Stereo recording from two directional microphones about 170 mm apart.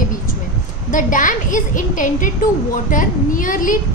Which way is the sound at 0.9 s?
50° left (ahead or behind).